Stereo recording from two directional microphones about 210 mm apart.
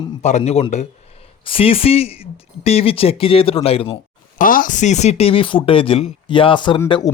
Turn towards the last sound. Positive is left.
turn(degrees=25)  # may be behind; listen again after turning